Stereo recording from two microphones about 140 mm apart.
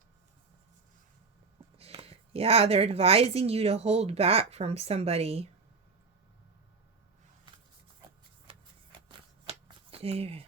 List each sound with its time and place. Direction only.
1.8 s a woman's voice: 45° right (ahead or behind)
8.4 s shuffling cards: 40° right (ahead or behind)